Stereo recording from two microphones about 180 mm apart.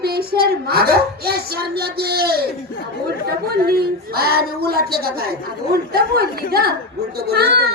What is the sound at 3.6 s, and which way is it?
Speech, 60° right (ahead or behind).